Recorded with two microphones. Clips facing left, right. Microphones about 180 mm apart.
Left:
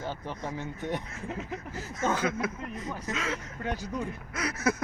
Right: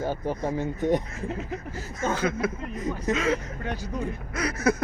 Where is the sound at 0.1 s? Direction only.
45° right (ahead or behind).